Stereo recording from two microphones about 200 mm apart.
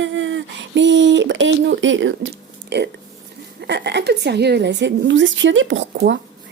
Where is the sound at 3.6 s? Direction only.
60° right (ahead or behind).